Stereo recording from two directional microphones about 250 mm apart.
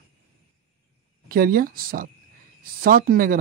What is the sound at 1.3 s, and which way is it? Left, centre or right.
Speech, right.